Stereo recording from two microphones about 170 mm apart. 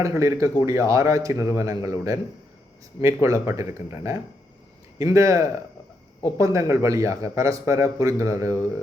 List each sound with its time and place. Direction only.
0.0 s a man's voice: 15° right (ahead or behind)